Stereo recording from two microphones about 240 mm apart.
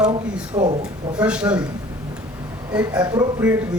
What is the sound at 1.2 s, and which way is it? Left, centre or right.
Speech, centre.